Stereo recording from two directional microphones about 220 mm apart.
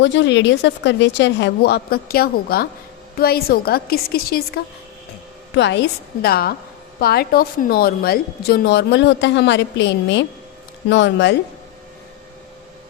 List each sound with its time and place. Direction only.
0.0 s a woman's voice: 55° left (ahead or behind)